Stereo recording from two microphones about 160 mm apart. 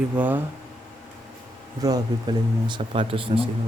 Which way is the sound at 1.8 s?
25° right (ahead or behind).